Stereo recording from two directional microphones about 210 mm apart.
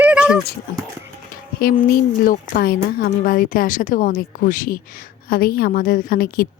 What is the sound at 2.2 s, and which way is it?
A woman's voice, 45° left (ahead or behind).